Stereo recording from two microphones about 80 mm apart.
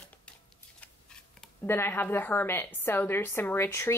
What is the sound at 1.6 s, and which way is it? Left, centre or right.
A woman's voice, left.